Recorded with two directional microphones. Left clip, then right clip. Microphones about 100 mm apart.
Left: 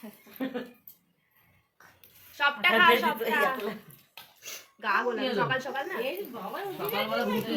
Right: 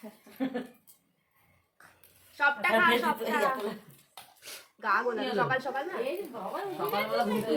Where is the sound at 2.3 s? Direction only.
20° right (ahead or behind).